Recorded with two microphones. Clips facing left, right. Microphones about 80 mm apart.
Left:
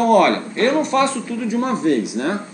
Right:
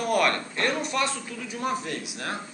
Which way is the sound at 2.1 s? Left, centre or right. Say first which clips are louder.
Left 11 dB; left.